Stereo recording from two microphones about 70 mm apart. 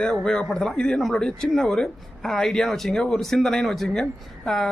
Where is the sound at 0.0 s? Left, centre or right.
Centre.